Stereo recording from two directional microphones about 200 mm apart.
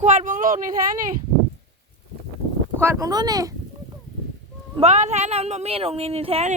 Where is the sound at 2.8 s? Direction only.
15° right (ahead or behind).